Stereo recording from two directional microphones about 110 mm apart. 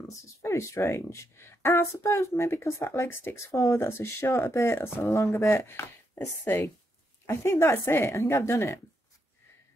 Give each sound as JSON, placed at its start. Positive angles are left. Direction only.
{"t": 0.1, "sound": "speech", "side_deg": 25}